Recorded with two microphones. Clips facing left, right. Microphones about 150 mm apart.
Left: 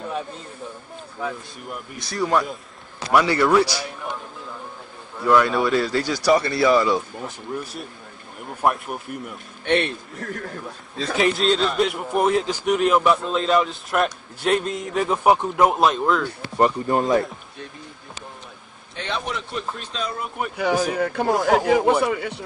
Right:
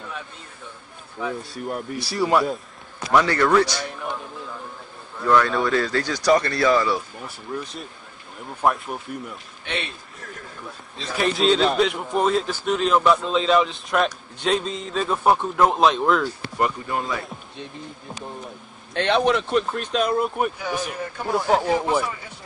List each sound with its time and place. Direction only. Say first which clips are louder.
1.7 s speech: right 5 dB; 30° right (ahead or behind)
2.1 s speech: right 1 dB; 5° right (ahead or behind)
3.1 s a man's voice: left 1 dB; 10° left (ahead or behind)
5.2 s a man's voice: left 1 dB; 10° left (ahead or behind)
9.7 s a man's voice: left 10 dB; 60° left (ahead or behind)
11.3 s a man's voice: right 2 dB; centre (ahead or behind)
16.5 s speech: left 6 dB; 35° left (ahead or behind)
18.9 s speech: right 9 dB; 75° right (ahead or behind)
20.5 s speech: left 7 dB; 80° left